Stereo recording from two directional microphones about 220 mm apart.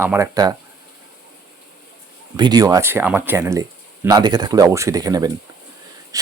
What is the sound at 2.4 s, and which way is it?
A man's voice, 20° right (ahead or behind).